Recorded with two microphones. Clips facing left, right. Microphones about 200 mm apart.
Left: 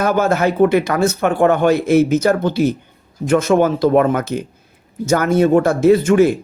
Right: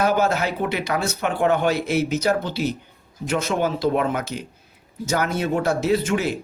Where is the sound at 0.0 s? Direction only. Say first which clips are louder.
Left 5 dB; 50° left (ahead or behind).